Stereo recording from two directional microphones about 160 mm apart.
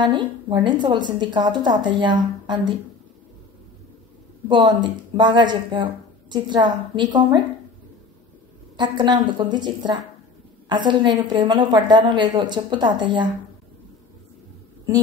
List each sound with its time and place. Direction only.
0.0 s a woman's voice: 30° right (ahead or behind)
4.5 s a woman's voice: 30° right (ahead or behind)
8.7 s a woman's voice: 30° right (ahead or behind)